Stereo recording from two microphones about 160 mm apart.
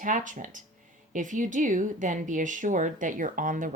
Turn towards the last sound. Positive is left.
turn(degrees=-55)  # may be behind; listen again after turning